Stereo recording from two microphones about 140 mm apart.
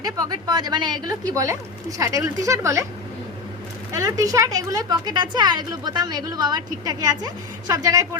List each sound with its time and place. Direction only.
0.0 s speech: 25° right (ahead or behind)
3.9 s speech: 25° right (ahead or behind)